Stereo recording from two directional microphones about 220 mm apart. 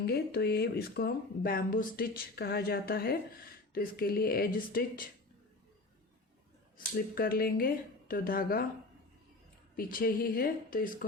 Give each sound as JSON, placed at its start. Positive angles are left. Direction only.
{"t": 0.0, "sound": "speech", "side_deg": 45}
{"t": 6.7, "sound": "speech", "side_deg": 40}
{"t": 9.7, "sound": "speech", "side_deg": 40}